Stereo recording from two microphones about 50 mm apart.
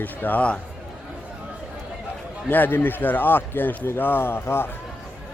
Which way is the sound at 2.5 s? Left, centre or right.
Left.